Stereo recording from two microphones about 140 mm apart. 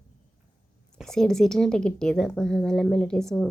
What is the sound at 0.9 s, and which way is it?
A woman's voice, 5° left (ahead or behind).